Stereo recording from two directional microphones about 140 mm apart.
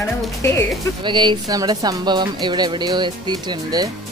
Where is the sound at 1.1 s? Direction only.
35° right (ahead or behind).